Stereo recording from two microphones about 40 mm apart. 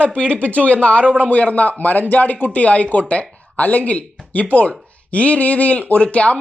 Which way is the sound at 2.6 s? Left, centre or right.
Left.